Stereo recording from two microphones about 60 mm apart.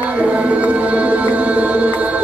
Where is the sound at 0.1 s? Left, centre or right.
Right.